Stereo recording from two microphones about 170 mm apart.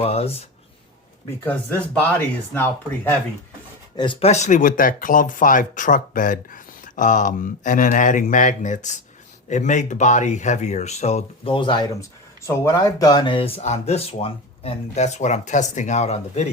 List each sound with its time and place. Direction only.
0.0 s speech: 35° left (ahead or behind)
1.5 s speech: 10° left (ahead or behind)
3.9 s speech: 30° left (ahead or behind)